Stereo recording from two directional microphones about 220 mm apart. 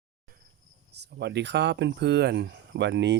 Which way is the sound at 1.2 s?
50° right (ahead or behind).